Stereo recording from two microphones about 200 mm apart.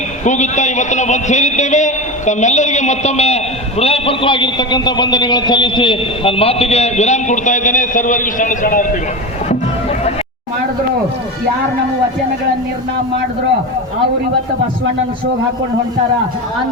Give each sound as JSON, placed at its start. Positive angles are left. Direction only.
{"t": 0.3, "sound": "a man's voice", "side_deg": 35}